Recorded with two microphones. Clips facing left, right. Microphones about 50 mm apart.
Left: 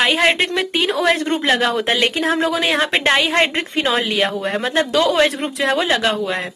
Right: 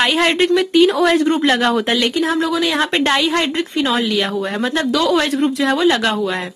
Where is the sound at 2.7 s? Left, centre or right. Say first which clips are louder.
Even; centre.